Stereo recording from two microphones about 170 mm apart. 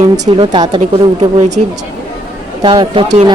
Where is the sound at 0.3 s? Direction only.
25° right (ahead or behind).